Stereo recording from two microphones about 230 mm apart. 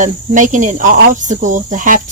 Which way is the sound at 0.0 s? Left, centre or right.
Right.